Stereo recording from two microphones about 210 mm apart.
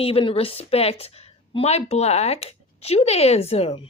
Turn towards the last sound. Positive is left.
turn(degrees=30)  # may be behind; listen again after turning